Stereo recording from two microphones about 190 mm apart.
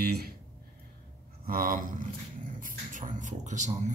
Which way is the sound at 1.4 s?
50° right (ahead or behind).